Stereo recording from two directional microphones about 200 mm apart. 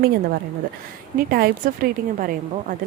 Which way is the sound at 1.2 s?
45° right (ahead or behind).